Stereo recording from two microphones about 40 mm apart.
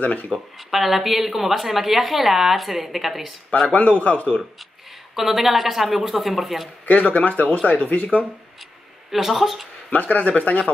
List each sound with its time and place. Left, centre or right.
0.0 s speech: left
0.3 s a woman's voice: centre
3.6 s speech: left
5.1 s a woman's voice: centre
7.0 s speech: left
9.1 s a woman's voice: centre
9.8 s speech: left